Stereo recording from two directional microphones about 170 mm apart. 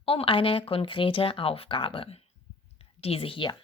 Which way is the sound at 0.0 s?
35° left (ahead or behind).